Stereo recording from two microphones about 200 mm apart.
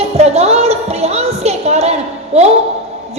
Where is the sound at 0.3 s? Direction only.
30° right (ahead or behind).